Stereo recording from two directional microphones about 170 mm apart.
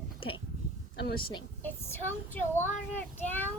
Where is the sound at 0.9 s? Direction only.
65° left (ahead or behind).